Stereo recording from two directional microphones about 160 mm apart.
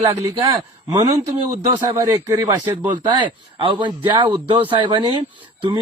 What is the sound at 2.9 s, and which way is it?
A man's voice, 30° right (ahead or behind).